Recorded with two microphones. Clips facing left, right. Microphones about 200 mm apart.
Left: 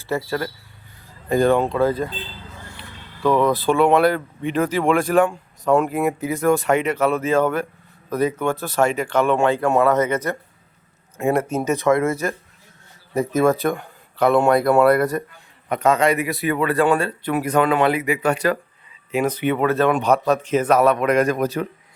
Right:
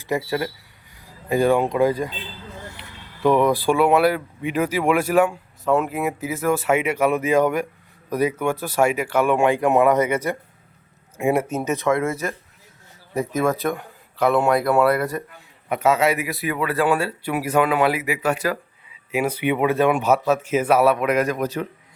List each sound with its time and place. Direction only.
0.0 s speech: 15° right (ahead or behind)